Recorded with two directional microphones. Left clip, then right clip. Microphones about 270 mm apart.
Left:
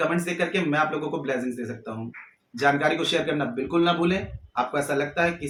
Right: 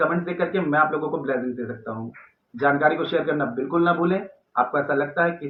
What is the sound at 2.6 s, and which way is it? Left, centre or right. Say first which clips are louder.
Speech: right 2 dB; left.